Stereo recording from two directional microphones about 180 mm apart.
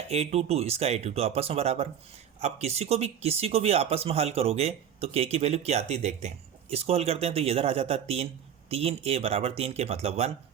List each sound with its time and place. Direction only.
0.1 s speech: 35° right (ahead or behind)